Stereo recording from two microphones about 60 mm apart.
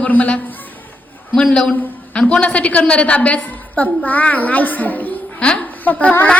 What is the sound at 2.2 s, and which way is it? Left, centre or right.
A woman's voice, centre.